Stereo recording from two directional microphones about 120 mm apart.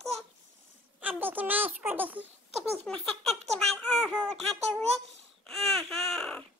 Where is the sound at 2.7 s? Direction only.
5° left (ahead or behind).